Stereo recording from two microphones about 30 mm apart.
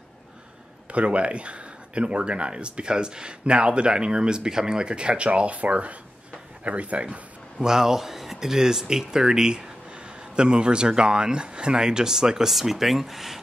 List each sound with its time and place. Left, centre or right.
0.9 s speech: right
7.6 s a man's voice: centre
9.9 s a man's voice: right
12.4 s speech: centre